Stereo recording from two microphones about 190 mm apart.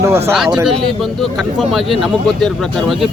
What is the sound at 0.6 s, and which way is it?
Speech, centre (ahead or behind).